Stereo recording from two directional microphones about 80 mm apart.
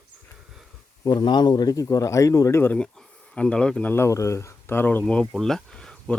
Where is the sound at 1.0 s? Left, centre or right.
Left.